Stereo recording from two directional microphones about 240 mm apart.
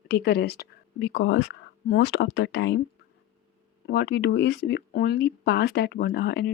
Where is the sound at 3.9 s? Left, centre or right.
Left.